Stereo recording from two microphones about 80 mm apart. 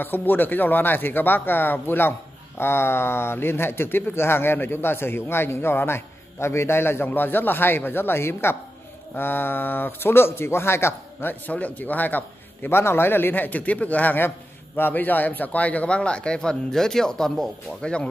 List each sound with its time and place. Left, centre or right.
0.0 s a man's voice: left